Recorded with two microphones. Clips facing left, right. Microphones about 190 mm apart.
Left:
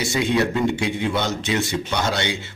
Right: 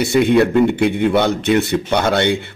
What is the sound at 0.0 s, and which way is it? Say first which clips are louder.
Speech: right 8 dB; 60° right (ahead or behind).